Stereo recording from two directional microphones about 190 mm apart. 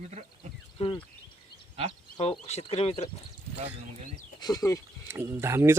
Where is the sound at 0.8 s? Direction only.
25° left (ahead or behind).